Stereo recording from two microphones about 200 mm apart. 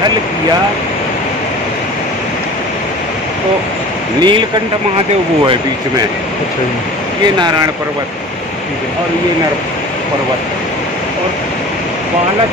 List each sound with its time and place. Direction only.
4.2 s speech: 25° right (ahead or behind)